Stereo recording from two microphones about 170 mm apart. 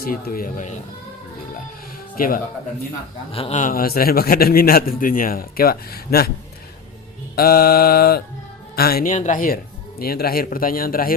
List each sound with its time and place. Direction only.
0.0 s a man's voice: 60° left (ahead or behind)
2.1 s speech: 55° left (ahead or behind)
3.3 s a man's voice: 35° left (ahead or behind)
3.6 s a man's voice: 55° left (ahead or behind)
7.3 s a man's voice: 65° left (ahead or behind)
9.1 s speech: 45° left (ahead or behind)
10.0 s a man's voice: 65° left (ahead or behind)